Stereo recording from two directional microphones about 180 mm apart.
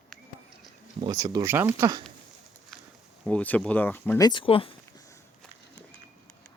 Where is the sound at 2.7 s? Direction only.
Centre (ahead or behind).